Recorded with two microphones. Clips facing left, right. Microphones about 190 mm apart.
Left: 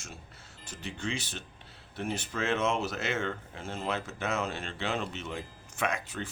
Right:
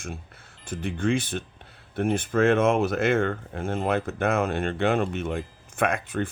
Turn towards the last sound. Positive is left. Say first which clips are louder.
# right 8 dB
turn(degrees=-55)  # may be behind; listen again after turning